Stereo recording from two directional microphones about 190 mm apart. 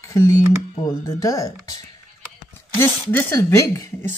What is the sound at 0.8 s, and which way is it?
Speech, 15° left (ahead or behind).